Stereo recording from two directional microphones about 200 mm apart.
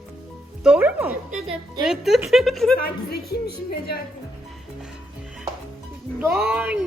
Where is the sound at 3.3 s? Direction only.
50° left (ahead or behind).